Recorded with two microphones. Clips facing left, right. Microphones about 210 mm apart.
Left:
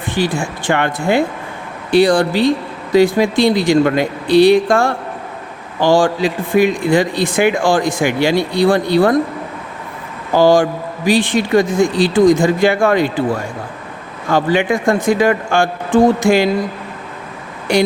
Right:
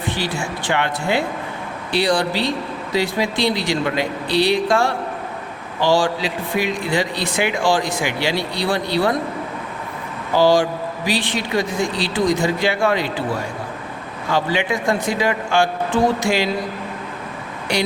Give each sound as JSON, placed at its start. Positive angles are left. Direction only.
{"t": 0.1, "sound": "a man's voice", "side_deg": 50}
{"t": 10.3, "sound": "a man's voice", "side_deg": 50}
{"t": 14.3, "sound": "a man's voice", "side_deg": 50}
{"t": 17.7, "sound": "a man's voice", "side_deg": 50}